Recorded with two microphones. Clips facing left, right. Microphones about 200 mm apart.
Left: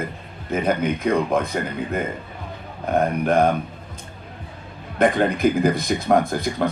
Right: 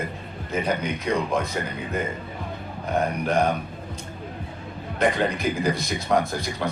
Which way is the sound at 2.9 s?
55° left (ahead or behind).